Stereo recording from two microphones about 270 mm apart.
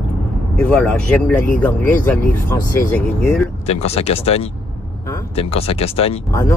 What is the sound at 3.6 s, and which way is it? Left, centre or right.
Speech, left.